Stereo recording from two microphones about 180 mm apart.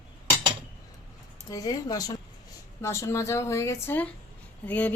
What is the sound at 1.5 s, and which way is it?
Speech, 20° left (ahead or behind).